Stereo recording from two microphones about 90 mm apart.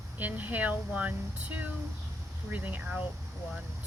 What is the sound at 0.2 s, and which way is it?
Speech, 20° right (ahead or behind).